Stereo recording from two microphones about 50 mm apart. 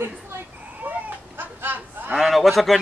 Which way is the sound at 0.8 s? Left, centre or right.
Right.